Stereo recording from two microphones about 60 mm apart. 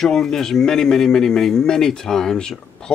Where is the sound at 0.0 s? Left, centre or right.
Centre.